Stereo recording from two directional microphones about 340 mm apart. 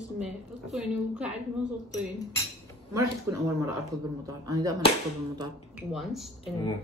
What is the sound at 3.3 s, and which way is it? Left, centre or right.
Speech, centre.